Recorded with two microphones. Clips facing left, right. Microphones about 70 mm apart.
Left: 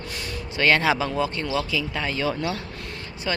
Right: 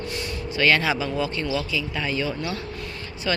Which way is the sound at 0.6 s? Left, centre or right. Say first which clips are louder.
Even; left.